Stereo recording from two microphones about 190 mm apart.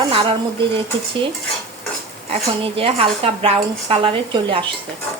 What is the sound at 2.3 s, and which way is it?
Speech, 30° right (ahead or behind).